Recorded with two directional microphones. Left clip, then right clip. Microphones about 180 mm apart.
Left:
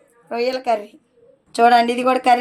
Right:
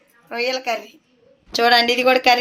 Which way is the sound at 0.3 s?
50° left (ahead or behind).